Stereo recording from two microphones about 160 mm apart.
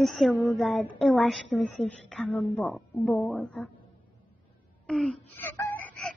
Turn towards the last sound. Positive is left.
turn(degrees=5)  # may be behind; listen again after turning